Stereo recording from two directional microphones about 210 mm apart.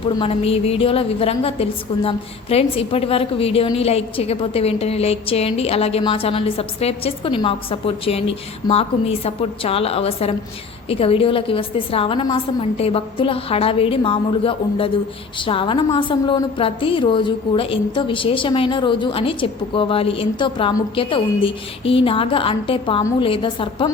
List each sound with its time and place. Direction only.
0.2 s a woman's voice: 30° left (ahead or behind)